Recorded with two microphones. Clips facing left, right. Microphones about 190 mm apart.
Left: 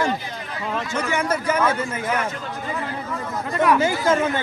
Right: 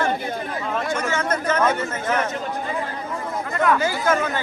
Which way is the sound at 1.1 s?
10° left (ahead or behind).